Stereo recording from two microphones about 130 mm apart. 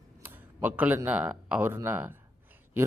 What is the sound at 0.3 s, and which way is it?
Speech, 15° right (ahead or behind).